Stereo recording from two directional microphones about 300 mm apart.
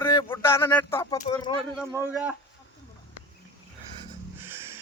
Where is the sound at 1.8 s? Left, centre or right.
Centre.